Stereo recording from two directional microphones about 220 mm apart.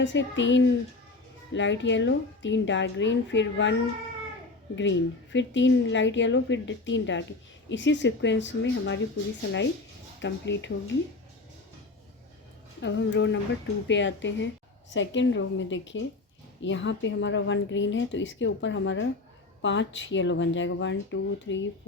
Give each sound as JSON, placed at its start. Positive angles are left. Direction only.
{"t": 0.0, "sound": "a woman's voice", "side_deg": 55}
{"t": 10.2, "sound": "a woman's voice", "side_deg": 55}
{"t": 12.8, "sound": "a woman's voice", "side_deg": 55}